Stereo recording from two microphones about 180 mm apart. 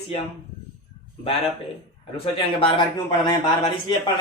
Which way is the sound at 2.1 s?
30° left (ahead or behind).